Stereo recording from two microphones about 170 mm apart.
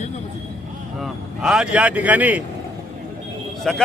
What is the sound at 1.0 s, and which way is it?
Speech, centre (ahead or behind).